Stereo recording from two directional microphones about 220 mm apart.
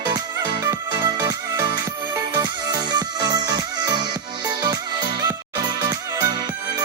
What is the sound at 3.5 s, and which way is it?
Music, 20° right (ahead or behind).